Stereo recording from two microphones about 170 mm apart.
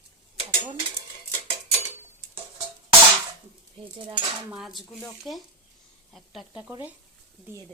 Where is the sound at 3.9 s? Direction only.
30° right (ahead or behind).